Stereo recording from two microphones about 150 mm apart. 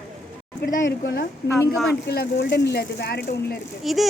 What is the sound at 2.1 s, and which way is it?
Speech, 90° left.